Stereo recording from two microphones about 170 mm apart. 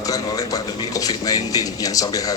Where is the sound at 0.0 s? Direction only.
20° left (ahead or behind).